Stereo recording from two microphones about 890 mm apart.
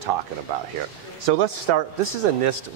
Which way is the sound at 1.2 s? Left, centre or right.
Right.